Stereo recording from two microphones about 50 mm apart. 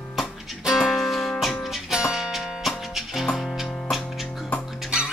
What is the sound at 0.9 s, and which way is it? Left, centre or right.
Music, centre.